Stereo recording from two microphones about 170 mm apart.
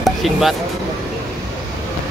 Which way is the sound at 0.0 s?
Centre (ahead or behind).